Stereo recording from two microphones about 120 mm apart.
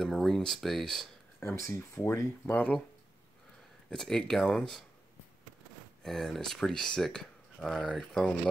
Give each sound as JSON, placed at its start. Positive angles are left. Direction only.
{"t": 0.0, "sound": "speech", "side_deg": 0}
{"t": 1.4, "sound": "speech", "side_deg": 20}
{"t": 3.9, "sound": "speech", "side_deg": 5}
{"t": 6.0, "sound": "speech", "side_deg": 5}